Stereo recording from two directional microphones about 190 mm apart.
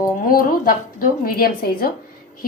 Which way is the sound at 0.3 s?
50° left (ahead or behind).